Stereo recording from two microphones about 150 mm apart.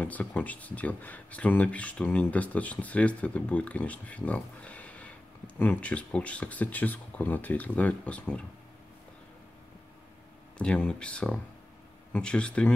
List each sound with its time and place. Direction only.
0.0 s speech: 10° left (ahead or behind)
10.6 s speech: 5° left (ahead or behind)